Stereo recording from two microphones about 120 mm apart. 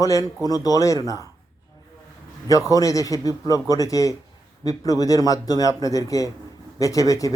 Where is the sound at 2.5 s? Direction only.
30° left (ahead or behind).